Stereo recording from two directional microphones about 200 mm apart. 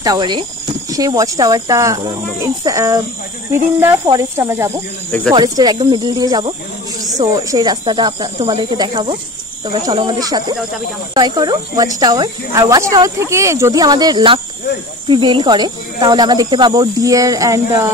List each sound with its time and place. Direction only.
0.0 s speech: 20° right (ahead or behind)